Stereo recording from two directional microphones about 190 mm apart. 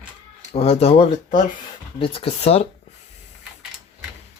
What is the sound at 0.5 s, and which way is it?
Speech, 35° left (ahead or behind).